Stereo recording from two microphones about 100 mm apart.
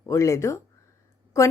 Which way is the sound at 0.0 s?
30° left (ahead or behind).